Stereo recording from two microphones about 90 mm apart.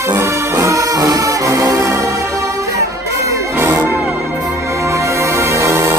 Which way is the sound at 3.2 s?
35° right (ahead or behind).